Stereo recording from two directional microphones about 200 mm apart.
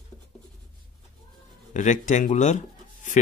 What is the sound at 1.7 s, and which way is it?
Speech, 40° left (ahead or behind).